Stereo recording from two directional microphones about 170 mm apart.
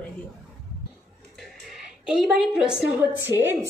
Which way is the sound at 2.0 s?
5° right (ahead or behind).